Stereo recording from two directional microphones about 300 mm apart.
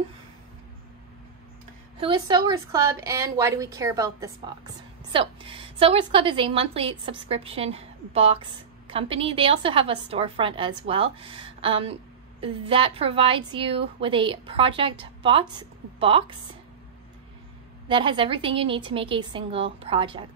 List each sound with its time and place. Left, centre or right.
2.0 s a woman's voice: centre
17.8 s a woman's voice: centre